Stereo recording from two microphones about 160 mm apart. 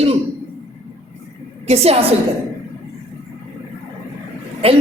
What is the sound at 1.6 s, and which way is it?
Speech, 40° right (ahead or behind).